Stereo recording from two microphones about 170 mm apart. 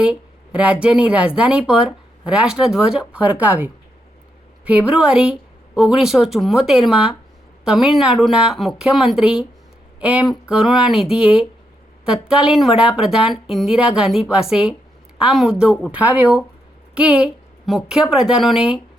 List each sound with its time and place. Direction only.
0.0 s speech: 5° right (ahead or behind)